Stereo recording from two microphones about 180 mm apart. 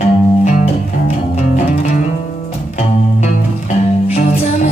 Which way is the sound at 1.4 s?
45° left (ahead or behind).